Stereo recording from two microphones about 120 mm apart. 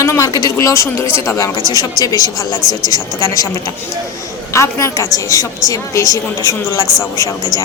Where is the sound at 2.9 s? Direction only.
25° left (ahead or behind).